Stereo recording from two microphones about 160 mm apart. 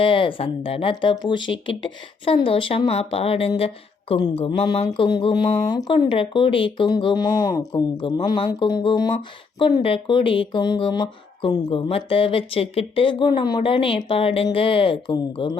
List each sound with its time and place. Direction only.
0.0 s speech: 35° left (ahead or behind)